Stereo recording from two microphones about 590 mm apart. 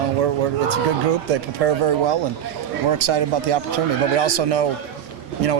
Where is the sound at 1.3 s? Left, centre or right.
Right.